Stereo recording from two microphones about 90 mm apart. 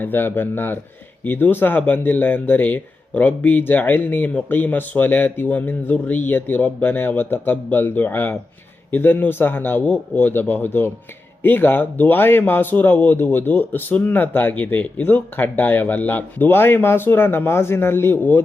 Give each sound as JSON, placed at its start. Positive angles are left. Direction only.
{"t": 0.0, "sound": "speech", "side_deg": 20}